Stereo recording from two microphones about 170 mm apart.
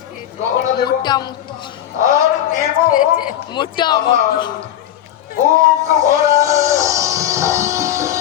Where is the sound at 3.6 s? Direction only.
25° left (ahead or behind).